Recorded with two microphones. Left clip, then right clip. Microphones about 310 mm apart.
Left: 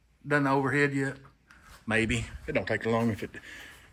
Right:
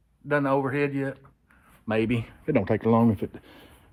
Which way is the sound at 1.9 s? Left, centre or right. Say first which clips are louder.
Right 2 dB; centre.